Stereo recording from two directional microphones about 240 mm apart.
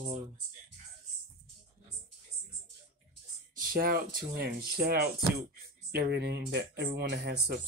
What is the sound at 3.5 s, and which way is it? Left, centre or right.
Speech, right.